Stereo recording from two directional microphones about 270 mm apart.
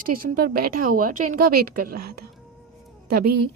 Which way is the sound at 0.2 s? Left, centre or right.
Right.